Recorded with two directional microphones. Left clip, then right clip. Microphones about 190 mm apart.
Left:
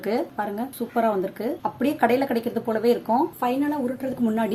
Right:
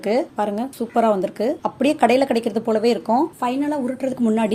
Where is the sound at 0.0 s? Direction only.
35° right (ahead or behind).